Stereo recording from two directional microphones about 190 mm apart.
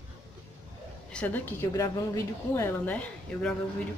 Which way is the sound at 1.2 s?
10° left (ahead or behind).